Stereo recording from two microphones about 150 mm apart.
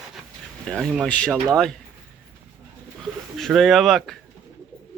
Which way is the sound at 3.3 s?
Centre (ahead or behind).